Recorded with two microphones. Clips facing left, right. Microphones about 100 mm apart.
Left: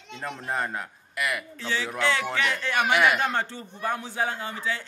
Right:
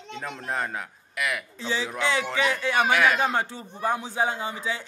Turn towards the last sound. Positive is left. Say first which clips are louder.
# right 1 dB
turn(degrees=-15)  # may be behind; listen again after turning